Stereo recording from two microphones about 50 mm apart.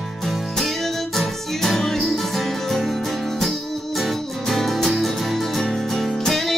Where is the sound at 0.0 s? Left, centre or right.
Centre.